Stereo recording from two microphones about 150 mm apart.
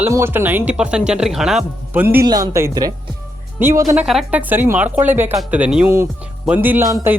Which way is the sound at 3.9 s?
5° right (ahead or behind).